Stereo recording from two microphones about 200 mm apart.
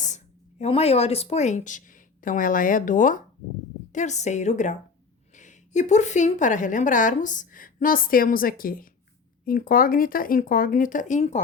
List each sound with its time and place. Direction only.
0.6 s a woman's voice: 30° left (ahead or behind)